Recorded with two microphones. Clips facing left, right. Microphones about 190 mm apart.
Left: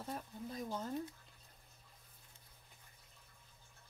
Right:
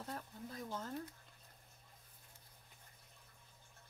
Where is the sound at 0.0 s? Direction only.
15° left (ahead or behind).